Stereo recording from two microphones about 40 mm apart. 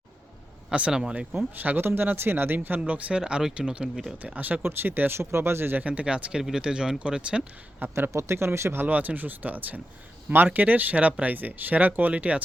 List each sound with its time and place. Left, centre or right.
0.7 s speech: right
1.5 s speech: right
2.0 s speech: right
3.1 s speech: right
4.4 s speech: right
4.6 s speech: right
5.1 s speech: right
5.8 s speech: right
7.9 s speech: right
8.9 s speech: right